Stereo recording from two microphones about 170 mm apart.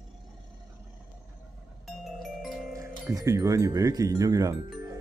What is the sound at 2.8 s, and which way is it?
Speech, 20° right (ahead or behind).